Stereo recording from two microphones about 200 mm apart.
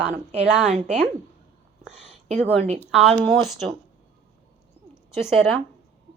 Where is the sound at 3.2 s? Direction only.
Centre (ahead or behind).